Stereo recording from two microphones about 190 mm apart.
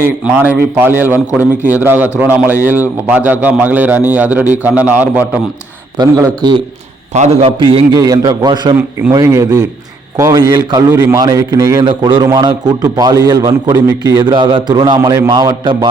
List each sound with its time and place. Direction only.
0.0 s a man's voice: 10° right (ahead or behind)
6.0 s a man's voice: 20° right (ahead or behind)
7.1 s a man's voice: 35° right (ahead or behind)
7.9 s a man's voice: 20° right (ahead or behind)